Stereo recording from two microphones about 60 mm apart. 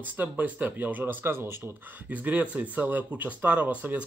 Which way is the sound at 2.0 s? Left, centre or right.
Right.